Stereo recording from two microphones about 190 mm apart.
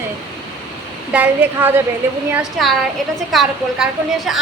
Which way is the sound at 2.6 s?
Centre (ahead or behind).